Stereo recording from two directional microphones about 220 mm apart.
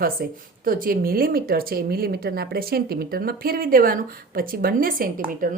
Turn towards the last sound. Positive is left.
turn(degrees=-40)  # may be behind; listen again after turning